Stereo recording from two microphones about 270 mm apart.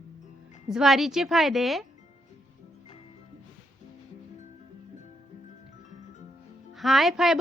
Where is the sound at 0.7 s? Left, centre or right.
Centre.